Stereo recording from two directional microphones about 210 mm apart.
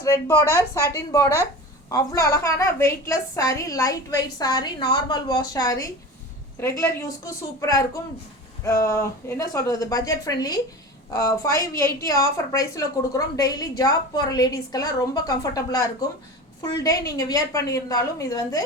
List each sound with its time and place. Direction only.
0.0 s a woman's voice: 15° left (ahead or behind)